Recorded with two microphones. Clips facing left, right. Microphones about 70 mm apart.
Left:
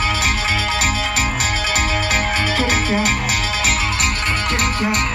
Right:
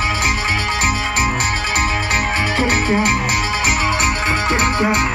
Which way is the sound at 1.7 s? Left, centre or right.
Centre.